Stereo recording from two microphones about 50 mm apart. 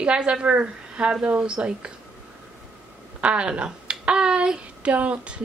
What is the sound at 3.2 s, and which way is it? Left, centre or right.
Speech, right.